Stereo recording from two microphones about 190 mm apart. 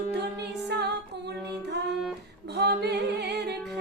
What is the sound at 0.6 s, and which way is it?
Music, 60° right (ahead or behind).